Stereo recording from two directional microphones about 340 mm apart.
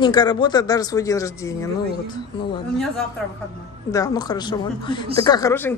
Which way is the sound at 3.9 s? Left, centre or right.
Centre.